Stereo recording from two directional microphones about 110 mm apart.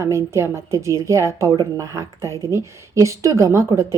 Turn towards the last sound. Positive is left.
turn(degrees=-25)  # may be behind; listen again after turning